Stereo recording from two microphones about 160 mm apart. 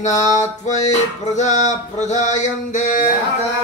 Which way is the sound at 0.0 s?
45° left (ahead or behind).